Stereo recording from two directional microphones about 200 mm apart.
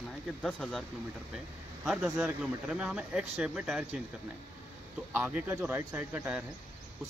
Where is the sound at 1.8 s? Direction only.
5° right (ahead or behind).